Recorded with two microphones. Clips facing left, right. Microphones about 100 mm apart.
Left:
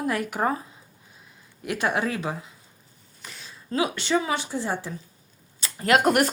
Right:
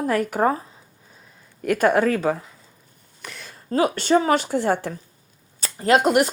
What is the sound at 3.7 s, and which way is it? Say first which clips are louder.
Speech: right 6 dB; 45° right (ahead or behind).